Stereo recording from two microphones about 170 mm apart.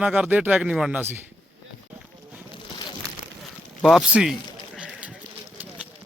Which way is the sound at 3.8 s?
Centre (ahead or behind).